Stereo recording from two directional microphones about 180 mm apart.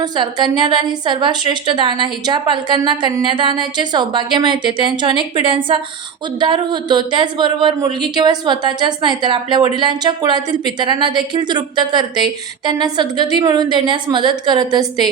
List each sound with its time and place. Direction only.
0.0 s a woman's voice: 25° right (ahead or behind)